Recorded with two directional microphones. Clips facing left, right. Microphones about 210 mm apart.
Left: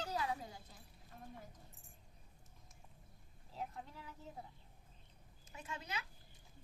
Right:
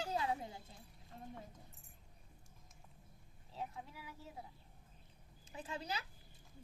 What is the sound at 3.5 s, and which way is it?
Speech, centre (ahead or behind).